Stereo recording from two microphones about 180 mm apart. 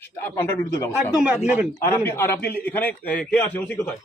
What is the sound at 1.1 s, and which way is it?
Speech, 5° right (ahead or behind).